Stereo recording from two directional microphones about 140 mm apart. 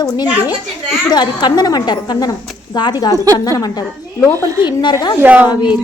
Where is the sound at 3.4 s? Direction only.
25° left (ahead or behind).